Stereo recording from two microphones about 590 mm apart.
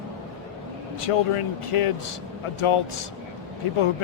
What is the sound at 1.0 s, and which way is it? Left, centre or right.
Speech, left.